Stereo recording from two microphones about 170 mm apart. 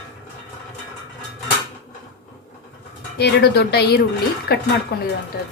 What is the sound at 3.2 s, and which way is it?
Speech, 75° left (ahead or behind).